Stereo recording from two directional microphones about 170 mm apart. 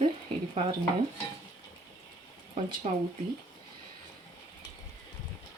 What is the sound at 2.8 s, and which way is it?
Speech, 40° right (ahead or behind).